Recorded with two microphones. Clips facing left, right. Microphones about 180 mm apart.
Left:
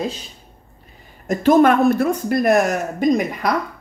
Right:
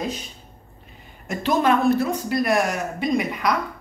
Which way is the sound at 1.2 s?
45° left (ahead or behind).